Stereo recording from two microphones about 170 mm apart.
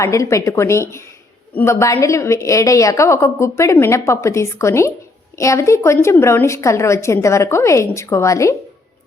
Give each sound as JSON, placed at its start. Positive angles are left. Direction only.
{"t": 0.0, "sound": "a woman's voice", "side_deg": 15}